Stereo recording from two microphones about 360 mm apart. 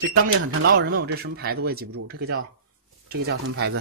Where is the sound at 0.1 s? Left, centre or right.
Right.